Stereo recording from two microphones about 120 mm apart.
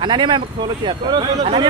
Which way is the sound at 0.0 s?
40° right (ahead or behind).